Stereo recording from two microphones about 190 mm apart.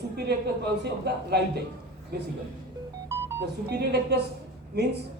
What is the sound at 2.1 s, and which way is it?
Speech, 60° right (ahead or behind).